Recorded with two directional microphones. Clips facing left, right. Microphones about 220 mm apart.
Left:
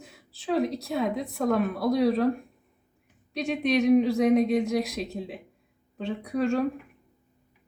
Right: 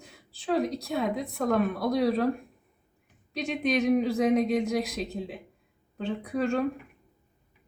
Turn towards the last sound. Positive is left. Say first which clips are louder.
# left 2 dB
turn(degrees=0)  # may be behind; listen again after turning